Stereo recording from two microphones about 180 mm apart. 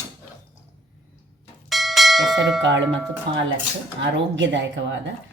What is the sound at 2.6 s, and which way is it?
Speech, 85° right.